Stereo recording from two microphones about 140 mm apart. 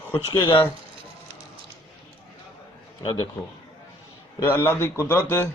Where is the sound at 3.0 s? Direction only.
35° left (ahead or behind).